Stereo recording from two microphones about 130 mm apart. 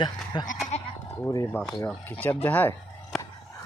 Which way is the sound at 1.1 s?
25° left (ahead or behind).